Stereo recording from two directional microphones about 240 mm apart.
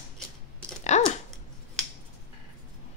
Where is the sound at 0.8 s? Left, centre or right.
Left.